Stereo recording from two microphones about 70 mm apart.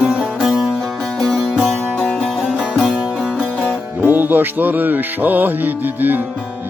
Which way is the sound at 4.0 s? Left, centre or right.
Right.